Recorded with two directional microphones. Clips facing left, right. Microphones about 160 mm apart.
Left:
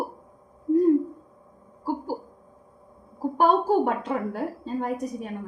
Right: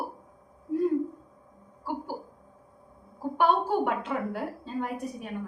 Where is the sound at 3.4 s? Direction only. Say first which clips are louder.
Left 4 dB; 40° left (ahead or behind).